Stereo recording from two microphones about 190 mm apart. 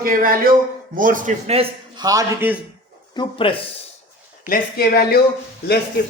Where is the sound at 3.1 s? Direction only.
25° left (ahead or behind).